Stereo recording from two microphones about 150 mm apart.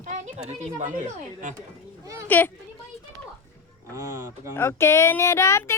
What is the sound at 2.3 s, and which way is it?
Speech, 10° left (ahead or behind).